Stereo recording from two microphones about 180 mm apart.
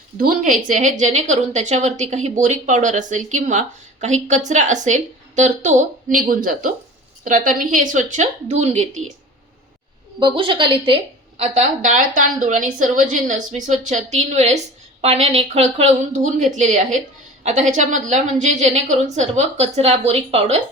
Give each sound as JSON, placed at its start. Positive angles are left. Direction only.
{"t": 0.2, "sound": "a woman's voice", "side_deg": -50}
{"t": 10.2, "sound": "a woman's voice", "side_deg": -25}
{"t": 11.3, "sound": "a woman's voice", "side_deg": -40}